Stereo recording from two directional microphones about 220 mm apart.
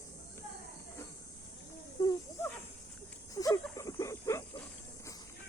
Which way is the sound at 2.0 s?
15° left (ahead or behind).